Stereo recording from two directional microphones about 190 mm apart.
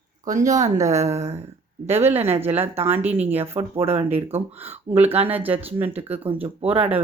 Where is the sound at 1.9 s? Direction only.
10° right (ahead or behind).